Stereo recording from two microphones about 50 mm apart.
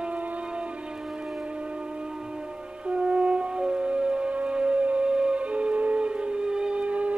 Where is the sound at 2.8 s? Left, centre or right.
Right.